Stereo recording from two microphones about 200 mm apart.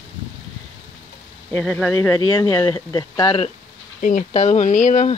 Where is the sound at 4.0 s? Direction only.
40° left (ahead or behind).